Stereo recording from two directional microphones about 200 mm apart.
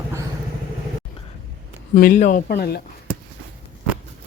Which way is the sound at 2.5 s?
55° left (ahead or behind).